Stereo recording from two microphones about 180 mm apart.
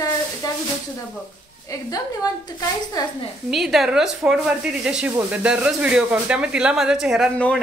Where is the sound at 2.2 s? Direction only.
20° left (ahead or behind).